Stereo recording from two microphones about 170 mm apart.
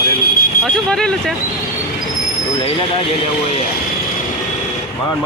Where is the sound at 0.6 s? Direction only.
5° left (ahead or behind).